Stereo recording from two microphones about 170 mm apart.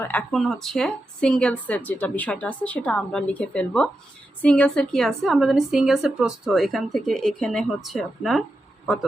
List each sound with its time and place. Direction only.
0.0 s a woman's voice: 10° left (ahead or behind)